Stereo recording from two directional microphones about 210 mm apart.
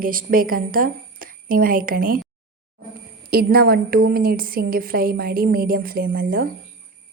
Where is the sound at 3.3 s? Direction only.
45° right (ahead or behind).